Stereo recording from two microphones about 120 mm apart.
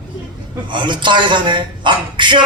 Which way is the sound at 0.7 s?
40° right (ahead or behind).